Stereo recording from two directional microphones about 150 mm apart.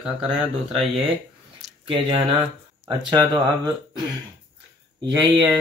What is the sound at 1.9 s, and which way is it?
Speech, 35° right (ahead or behind).